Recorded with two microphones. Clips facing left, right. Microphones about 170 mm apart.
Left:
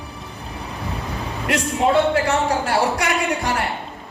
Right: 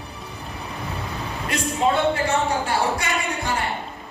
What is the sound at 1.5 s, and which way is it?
A man's voice, 70° left (ahead or behind).